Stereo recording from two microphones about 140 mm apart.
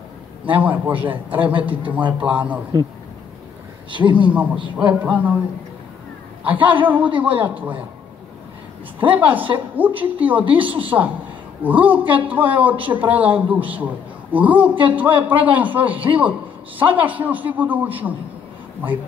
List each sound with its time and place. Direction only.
0.5 s a man's voice: 10° right (ahead or behind)
2.7 s speech: 30° right (ahead or behind)
3.9 s a man's voice: 35° right (ahead or behind)
4.3 s a man's voice: 10° right (ahead or behind)
6.4 s a man's voice: 10° right (ahead or behind)
9.1 s a man's voice: 10° right (ahead or behind)